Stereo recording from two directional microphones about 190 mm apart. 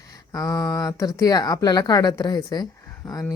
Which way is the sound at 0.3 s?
20° left (ahead or behind).